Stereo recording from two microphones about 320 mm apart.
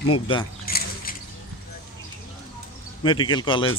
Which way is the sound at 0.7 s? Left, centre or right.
Left.